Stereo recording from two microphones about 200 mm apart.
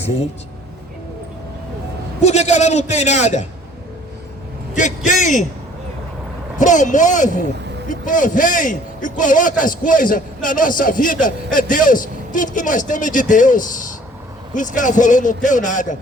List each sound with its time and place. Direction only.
2.2 s a man's voice: 35° left (ahead or behind)
4.8 s a man's voice: 40° left (ahead or behind)
6.6 s a man's voice: 40° left (ahead or behind)